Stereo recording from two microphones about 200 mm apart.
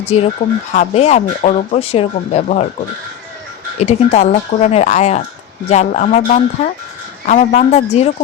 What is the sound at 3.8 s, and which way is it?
Speech, 30° left (ahead or behind).